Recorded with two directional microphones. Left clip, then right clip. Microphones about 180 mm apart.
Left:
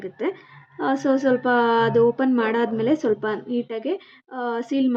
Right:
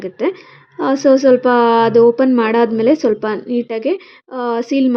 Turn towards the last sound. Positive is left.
turn(degrees=-20)  # may be behind; listen again after turning